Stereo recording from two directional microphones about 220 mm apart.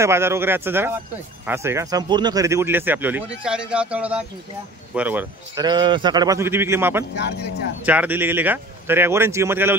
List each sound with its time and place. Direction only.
0.0 s speech: 10° right (ahead or behind)
5.6 s speech: 20° right (ahead or behind)
7.2 s speech: 50° left (ahead or behind)
7.8 s speech: 5° right (ahead or behind)